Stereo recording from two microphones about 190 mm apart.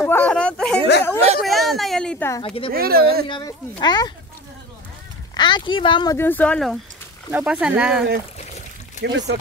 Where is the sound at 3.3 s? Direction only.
25° left (ahead or behind).